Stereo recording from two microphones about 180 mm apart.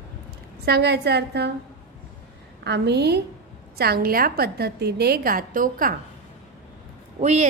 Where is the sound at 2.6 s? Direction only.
70° right (ahead or behind); by 6.0 s 50° right (ahead or behind).